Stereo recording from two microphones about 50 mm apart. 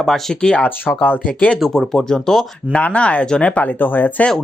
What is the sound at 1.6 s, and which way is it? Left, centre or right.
Speech, centre.